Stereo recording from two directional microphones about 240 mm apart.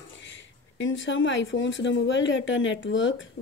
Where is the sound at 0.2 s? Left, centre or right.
Left.